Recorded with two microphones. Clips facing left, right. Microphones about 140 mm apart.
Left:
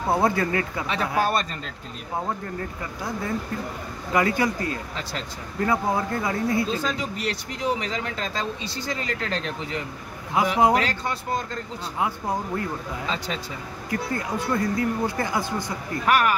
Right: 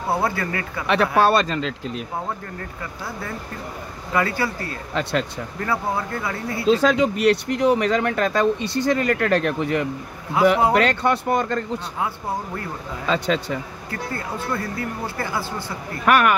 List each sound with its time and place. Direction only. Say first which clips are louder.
0.2 s speech: left 2 dB; 20° left (ahead or behind)
0.8 s speech: right 10 dB; 75° right (ahead or behind); by 1.7 s 90° right
4.1 s speech: left 1 dB; 20° left (ahead or behind)
6.7 s speech: right 10 dB; 80° right; by 9.8 s 60° right (ahead or behind)
10.4 s speech: right 6 dB; 15° left (ahead or behind)
10.7 s speech: right 5 dB; 65° right (ahead or behind)
13.0 s speech: right 12 dB; 70° right (ahead or behind)
13.8 s speech: left 5 dB; 15° left (ahead or behind)
16.1 s speech: right 4 dB; 65° right (ahead or behind)